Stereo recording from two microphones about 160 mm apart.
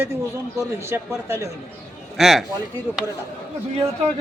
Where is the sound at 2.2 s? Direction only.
Centre (ahead or behind).